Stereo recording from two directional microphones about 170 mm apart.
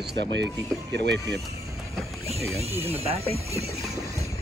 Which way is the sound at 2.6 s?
40° right (ahead or behind).